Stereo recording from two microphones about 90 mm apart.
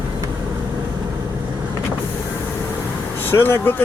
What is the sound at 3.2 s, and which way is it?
Speech, 25° left (ahead or behind).